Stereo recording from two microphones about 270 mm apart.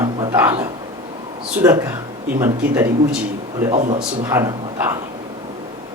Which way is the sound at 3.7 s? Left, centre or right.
Right.